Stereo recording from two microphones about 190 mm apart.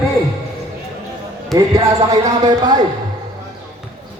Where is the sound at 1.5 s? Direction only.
20° right (ahead or behind).